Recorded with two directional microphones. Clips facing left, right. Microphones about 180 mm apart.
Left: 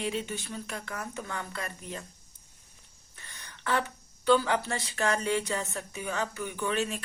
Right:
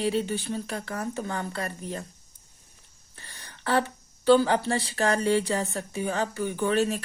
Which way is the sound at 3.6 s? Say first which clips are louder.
Right 5 dB; 35° right (ahead or behind).